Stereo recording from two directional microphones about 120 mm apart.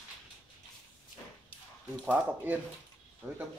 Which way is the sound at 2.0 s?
15° right (ahead or behind).